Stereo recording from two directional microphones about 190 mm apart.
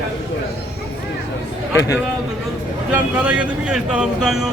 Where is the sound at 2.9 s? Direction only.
5° right (ahead or behind).